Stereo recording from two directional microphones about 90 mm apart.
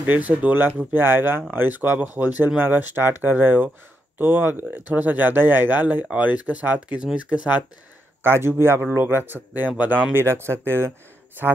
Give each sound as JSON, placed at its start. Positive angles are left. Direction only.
{"t": 0.1, "sound": "speech", "side_deg": -20}
{"t": 8.2, "sound": "speech", "side_deg": -25}